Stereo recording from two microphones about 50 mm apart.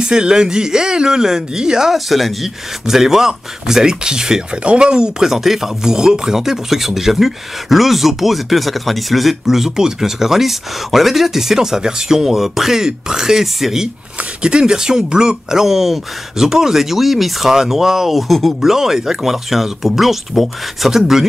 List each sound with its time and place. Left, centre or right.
0.0 s speech: centre
2.0 s speech: centre
5.3 s speech: centre
14.4 s speech: centre